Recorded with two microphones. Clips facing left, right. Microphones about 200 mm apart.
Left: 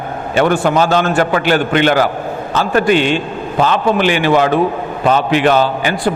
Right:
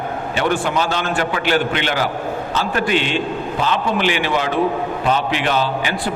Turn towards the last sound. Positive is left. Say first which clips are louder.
# left 7 dB
turn(degrees=50)  # may be behind; listen again after turning